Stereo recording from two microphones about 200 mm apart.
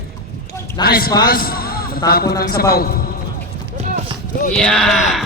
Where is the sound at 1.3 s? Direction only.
50° left (ahead or behind).